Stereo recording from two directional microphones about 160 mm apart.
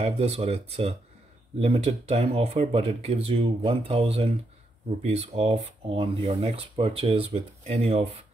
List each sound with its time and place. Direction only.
0.0 s speech: 40° right (ahead or behind)